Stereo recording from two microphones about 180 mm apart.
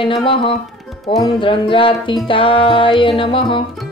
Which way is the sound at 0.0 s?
30° left (ahead or behind).